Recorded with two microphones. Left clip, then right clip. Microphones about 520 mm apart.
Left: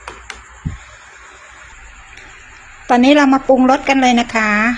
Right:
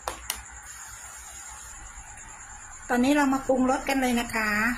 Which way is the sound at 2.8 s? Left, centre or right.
Right.